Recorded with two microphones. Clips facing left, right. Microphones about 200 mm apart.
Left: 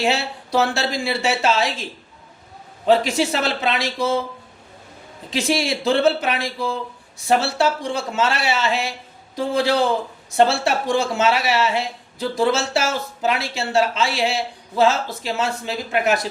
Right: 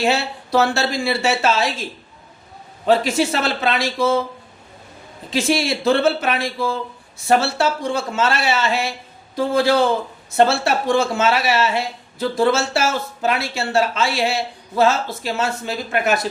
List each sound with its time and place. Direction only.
0.0 s speech: 15° left (ahead or behind)
2.8 s speech: 15° left (ahead or behind)
5.3 s speech: 15° left (ahead or behind)